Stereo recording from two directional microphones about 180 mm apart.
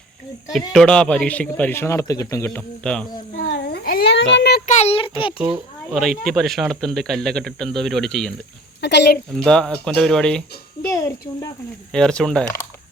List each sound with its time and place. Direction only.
0.7 s speech: 5° left (ahead or behind)
3.3 s speech: 85° left
4.6 s a child's voice: 40° left (ahead or behind)
5.5 s speech: centre (ahead or behind)
8.8 s speech: 70° left (ahead or behind)
9.4 s speech: 5° left (ahead or behind)
10.8 s a child's voice: 20° left (ahead or behind)
11.9 s speech: 5° left (ahead or behind)